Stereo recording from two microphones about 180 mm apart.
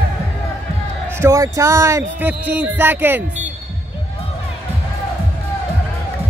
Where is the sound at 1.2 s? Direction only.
15° right (ahead or behind).